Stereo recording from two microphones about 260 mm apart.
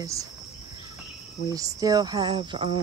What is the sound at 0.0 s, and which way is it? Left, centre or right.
Speech, centre.